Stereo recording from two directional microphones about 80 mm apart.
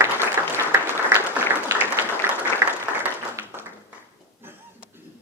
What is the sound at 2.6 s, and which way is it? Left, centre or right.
Applause, right.